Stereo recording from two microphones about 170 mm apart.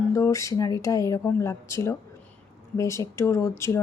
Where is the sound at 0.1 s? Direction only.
15° left (ahead or behind).